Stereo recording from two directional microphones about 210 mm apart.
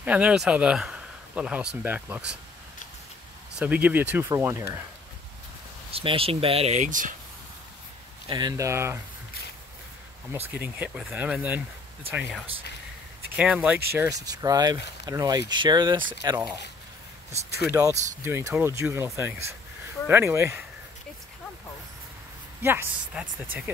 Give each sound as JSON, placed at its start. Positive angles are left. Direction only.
{"t": 0.0, "sound": "speech", "side_deg": -5}
{"t": 3.5, "sound": "speech", "side_deg": -5}
{"t": 5.9, "sound": "speech", "side_deg": -25}
{"t": 8.3, "sound": "speech", "side_deg": -20}
{"t": 10.6, "sound": "speech", "side_deg": -5}
{"t": 13.4, "sound": "speech", "side_deg": -5}
{"t": 17.6, "sound": "speech", "side_deg": -15}
{"t": 22.6, "sound": "speech", "side_deg": -10}